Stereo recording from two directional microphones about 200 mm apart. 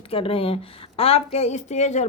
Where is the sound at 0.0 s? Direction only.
30° left (ahead or behind).